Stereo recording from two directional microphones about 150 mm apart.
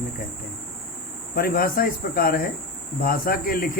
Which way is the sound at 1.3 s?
80° left.